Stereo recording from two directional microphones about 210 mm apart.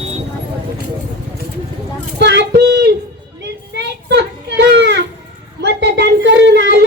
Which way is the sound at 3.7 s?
55° right (ahead or behind).